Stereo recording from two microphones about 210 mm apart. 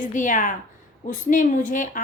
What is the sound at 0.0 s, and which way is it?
Speech, 35° left (ahead or behind).